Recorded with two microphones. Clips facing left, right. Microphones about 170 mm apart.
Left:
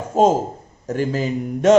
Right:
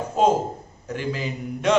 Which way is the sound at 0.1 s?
45° left (ahead or behind).